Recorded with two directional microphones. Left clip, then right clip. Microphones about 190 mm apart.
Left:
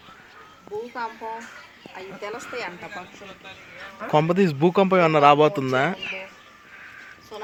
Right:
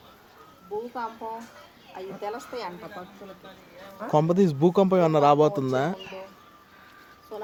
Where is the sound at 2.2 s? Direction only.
60° right (ahead or behind).